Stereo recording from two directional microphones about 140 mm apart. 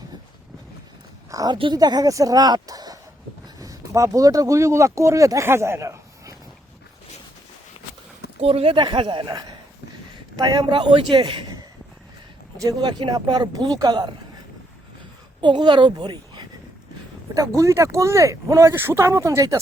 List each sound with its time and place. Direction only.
1.3 s speech: 25° right (ahead or behind)
8.4 s a woman's voice: 45° right (ahead or behind)
12.6 s speech: 30° right (ahead or behind)
15.4 s a woman's voice: 35° right (ahead or behind)